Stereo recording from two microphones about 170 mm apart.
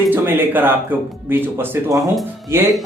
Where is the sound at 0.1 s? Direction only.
10° right (ahead or behind).